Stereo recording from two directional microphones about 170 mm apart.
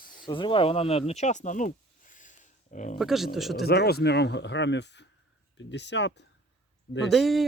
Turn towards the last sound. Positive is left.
turn(degrees=0)  # may be behind; listen again after turning